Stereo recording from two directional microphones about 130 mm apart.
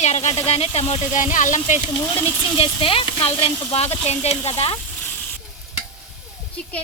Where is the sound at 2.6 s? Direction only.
45° left (ahead or behind).